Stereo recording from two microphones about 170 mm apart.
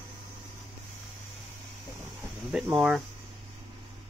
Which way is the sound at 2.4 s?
5° right (ahead or behind).